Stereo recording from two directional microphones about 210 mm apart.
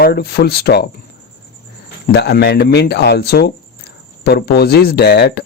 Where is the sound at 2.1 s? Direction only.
50° left (ahead or behind).